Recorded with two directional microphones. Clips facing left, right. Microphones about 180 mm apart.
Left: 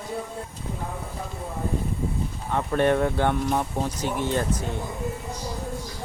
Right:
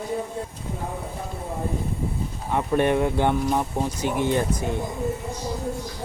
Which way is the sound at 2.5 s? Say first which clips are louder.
Right 1 dB; 15° right (ahead or behind).